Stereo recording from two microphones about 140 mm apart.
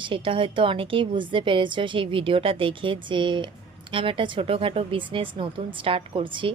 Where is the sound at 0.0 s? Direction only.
40° right (ahead or behind).